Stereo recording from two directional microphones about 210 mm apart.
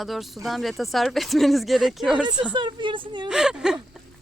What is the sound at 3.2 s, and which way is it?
Speech, 5° right (ahead or behind).